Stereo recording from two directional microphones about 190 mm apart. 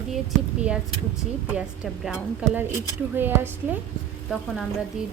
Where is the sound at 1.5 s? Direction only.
5° right (ahead or behind).